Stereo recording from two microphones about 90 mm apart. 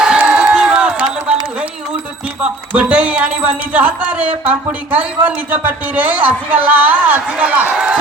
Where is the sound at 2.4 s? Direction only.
10° right (ahead or behind).